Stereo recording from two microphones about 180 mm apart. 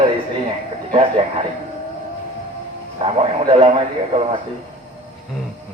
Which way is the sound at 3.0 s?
30° right (ahead or behind).